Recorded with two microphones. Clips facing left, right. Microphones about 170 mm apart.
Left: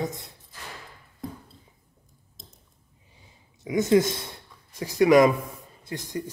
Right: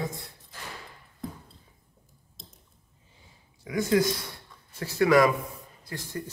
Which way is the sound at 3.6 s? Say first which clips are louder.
Left 4 dB; 20° left (ahead or behind).